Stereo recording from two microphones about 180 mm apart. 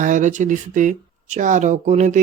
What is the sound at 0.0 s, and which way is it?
Speech, 45° right (ahead or behind).